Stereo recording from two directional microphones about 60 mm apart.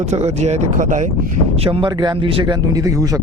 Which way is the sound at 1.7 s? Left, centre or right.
Right.